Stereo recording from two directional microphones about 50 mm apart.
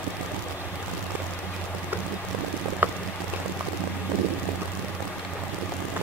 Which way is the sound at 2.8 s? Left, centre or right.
Right.